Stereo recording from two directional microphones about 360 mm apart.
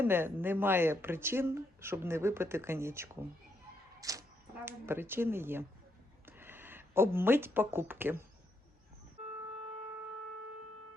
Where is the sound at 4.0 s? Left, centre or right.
Centre.